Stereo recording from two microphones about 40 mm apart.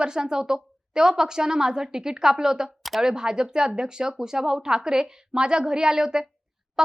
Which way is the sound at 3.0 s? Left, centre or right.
Centre.